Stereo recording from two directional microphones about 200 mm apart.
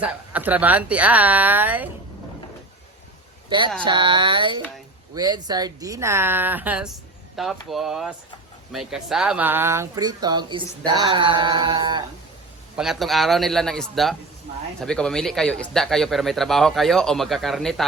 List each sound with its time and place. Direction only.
0.0 s a woman's voice: 10° right (ahead or behind)
3.5 s a woman's voice: 25° right (ahead or behind)
12.7 s speech: centre (ahead or behind)